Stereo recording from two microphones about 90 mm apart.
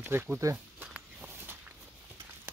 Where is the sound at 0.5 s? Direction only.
15° right (ahead or behind).